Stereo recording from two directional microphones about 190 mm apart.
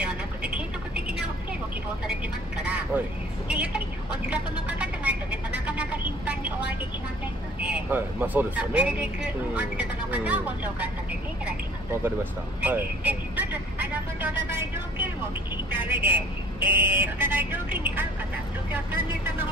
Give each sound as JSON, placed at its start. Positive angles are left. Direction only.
{"t": 0.0, "sound": "vehicle", "side_deg": -5}
{"t": 3.4, "sound": "music", "side_deg": -5}
{"t": 7.6, "sound": "speech", "side_deg": -5}
{"t": 12.6, "sound": "speech", "side_deg": -10}